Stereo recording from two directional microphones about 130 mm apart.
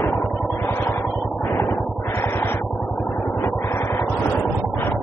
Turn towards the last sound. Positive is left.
turn(degrees=20)  # may be behind; listen again after turning